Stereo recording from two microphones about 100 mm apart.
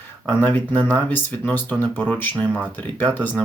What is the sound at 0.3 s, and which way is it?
Speech, 20° left (ahead or behind).